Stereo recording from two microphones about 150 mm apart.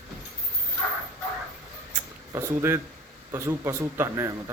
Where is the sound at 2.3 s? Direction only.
15° right (ahead or behind).